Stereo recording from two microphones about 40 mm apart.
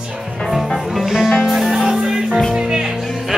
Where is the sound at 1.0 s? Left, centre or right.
Centre.